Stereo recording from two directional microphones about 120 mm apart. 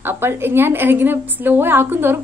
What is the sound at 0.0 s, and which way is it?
A woman's voice, 20° right (ahead or behind).